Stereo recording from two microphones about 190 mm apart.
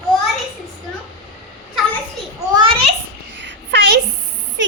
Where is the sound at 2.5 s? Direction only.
25° right (ahead or behind).